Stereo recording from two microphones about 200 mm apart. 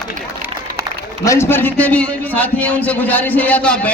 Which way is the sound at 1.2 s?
15° left (ahead or behind).